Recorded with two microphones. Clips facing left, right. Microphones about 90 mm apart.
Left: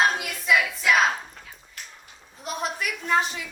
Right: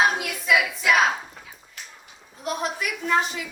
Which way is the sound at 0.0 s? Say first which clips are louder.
Right 1 dB; 5° right (ahead or behind).